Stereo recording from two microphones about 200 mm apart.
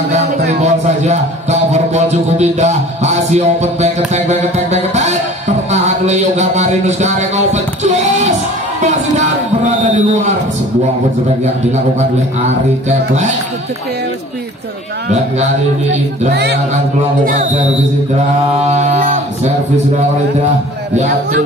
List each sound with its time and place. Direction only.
0.1 s a man's voice: 35° right (ahead or behind)
12.4 s a man's voice: 35° right (ahead or behind)
17.2 s speech: 45° right (ahead or behind)
18.7 s music: 35° right (ahead or behind)